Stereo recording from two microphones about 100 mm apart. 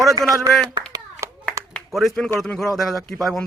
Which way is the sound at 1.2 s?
30° right (ahead or behind).